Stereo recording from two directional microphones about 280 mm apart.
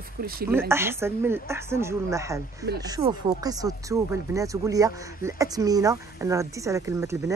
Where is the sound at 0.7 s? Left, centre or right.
Centre.